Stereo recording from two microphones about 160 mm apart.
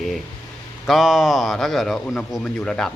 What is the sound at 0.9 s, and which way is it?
Speech, centre (ahead or behind).